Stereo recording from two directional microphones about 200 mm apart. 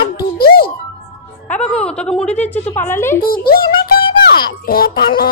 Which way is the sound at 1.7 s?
5° left (ahead or behind).